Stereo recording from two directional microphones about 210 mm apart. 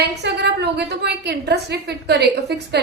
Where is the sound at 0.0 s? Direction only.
50° right (ahead or behind).